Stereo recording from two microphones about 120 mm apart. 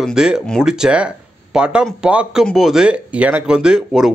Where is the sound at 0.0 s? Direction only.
5° right (ahead or behind).